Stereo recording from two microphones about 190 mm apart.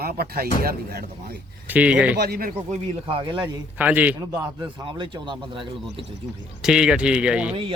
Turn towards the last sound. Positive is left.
turn(degrees=-5)  # may be behind; listen again after turning